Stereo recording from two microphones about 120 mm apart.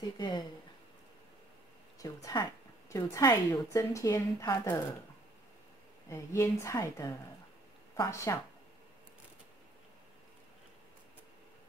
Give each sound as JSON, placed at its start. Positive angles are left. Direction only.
{"t": 2.0, "sound": "a woman's voice", "side_deg": 30}
{"t": 6.0, "sound": "a woman's voice", "side_deg": 25}